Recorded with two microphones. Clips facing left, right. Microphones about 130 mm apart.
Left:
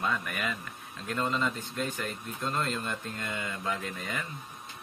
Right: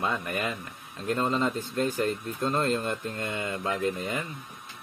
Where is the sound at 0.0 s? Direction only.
25° right (ahead or behind).